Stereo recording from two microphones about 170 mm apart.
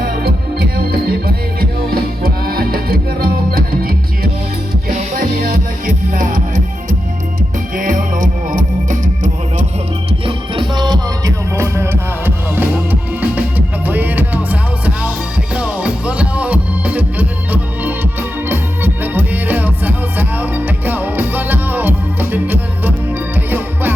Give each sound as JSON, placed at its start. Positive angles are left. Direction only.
{"t": 0.0, "sound": "music", "side_deg": -65}
{"t": 7.8, "sound": "music", "side_deg": -50}
{"t": 10.1, "sound": "music", "side_deg": -30}